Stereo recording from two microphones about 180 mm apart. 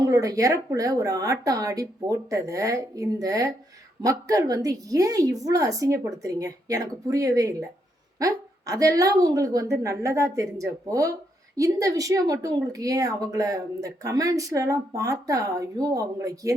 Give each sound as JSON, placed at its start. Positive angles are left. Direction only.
{"t": 0.0, "sound": "speech", "side_deg": -20}